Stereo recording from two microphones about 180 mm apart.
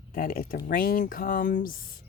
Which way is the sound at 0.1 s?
55° left (ahead or behind).